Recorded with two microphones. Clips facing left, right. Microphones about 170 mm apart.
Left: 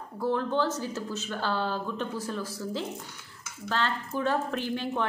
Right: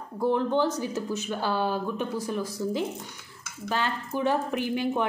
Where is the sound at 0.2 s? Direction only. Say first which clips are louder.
Right 3 dB; 20° right (ahead or behind).